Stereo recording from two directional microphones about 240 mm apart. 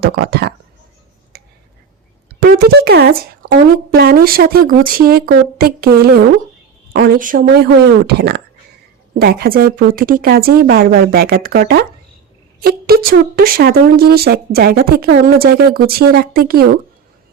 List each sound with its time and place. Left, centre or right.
0.0 s speech: right
1.3 s a sound: right
2.4 s speech: right
6.9 s speech: right